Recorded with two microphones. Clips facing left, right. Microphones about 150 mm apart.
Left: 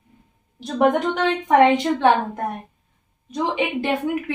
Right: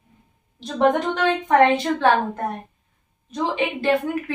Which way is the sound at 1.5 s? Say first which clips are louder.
Left 2 dB; 15° left (ahead or behind).